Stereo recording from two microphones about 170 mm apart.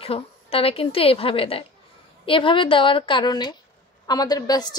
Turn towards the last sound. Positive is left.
turn(degrees=25)  # may be behind; listen again after turning